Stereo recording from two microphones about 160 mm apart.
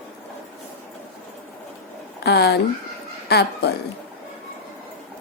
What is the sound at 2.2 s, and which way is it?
A woman's voice, 90° left.